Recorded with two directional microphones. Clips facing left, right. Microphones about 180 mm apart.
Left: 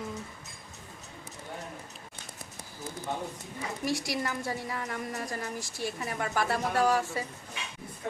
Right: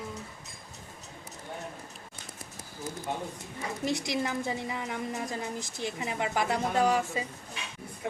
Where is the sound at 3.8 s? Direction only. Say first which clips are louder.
Right 1 dB; 20° right (ahead or behind).